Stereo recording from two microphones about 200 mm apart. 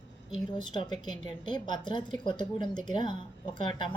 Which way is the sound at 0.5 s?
20° left (ahead or behind).